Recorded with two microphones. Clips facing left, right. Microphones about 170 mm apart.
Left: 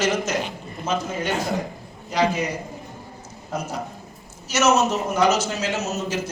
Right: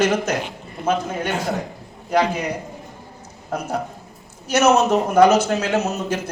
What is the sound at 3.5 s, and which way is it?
A man's voice, 55° right (ahead or behind).